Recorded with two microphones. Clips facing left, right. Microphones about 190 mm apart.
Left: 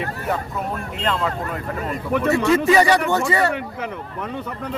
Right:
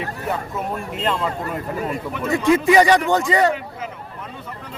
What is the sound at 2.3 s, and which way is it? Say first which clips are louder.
A man's voice: right 2 dB; 15° right (ahead or behind).